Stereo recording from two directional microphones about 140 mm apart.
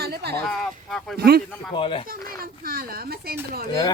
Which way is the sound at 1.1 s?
90° right.